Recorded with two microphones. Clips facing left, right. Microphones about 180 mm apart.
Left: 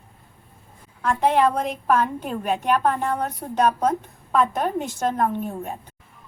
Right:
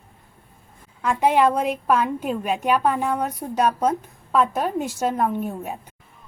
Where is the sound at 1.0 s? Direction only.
10° right (ahead or behind).